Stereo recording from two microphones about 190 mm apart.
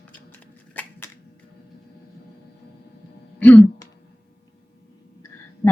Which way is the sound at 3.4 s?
10° left (ahead or behind).